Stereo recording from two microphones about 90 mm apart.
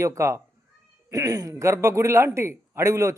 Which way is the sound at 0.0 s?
35° right (ahead or behind).